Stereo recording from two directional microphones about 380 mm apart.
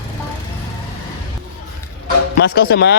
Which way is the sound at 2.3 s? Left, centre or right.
Left.